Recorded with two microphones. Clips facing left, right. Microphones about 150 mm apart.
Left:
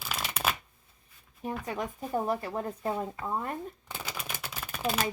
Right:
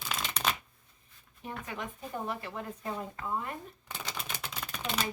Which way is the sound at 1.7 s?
40° left (ahead or behind).